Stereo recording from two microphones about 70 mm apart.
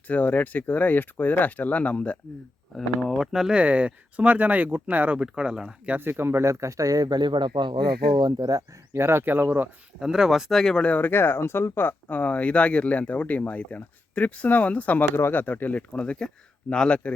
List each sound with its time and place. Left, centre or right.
0.1 s speech: left
3.1 s speech: centre
3.6 s speech: centre
5.2 s speech: centre
6.0 s speech: right
8.9 s speech: right
10.0 s speech: centre
10.6 s speech: centre
10.8 s speech: left